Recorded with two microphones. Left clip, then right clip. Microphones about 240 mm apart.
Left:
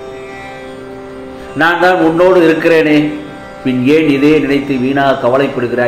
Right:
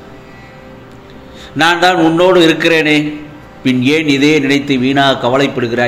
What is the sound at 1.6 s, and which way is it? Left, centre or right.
Speech, right.